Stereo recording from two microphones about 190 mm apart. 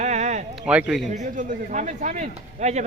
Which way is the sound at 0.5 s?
5° right (ahead or behind).